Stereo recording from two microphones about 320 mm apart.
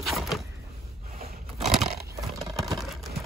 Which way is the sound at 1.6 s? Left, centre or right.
Centre.